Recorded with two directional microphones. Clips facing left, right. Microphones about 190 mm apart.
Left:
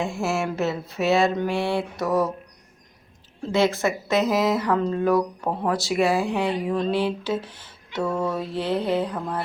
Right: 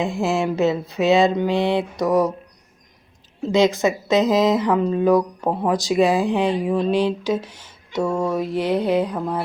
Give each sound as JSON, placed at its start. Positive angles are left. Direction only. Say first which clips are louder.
{"t": 0.0, "sound": "speech", "louder": "right 4 dB", "side_deg": -15}
{"t": 3.4, "sound": "speech", "louder": "right 4 dB", "side_deg": -15}